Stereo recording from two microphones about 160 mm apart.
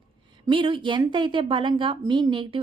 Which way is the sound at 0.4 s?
30° right (ahead or behind).